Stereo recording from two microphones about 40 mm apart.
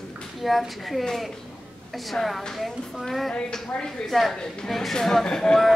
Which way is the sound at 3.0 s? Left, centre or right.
Centre.